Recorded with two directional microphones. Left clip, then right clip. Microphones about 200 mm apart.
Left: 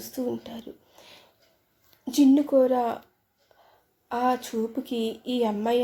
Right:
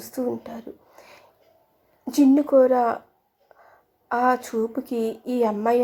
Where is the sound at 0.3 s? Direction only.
10° right (ahead or behind).